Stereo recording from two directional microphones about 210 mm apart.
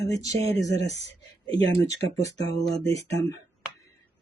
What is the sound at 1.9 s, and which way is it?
Speech, 15° left (ahead or behind).